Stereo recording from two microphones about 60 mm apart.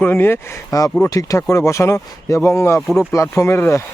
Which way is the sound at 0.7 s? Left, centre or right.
Left.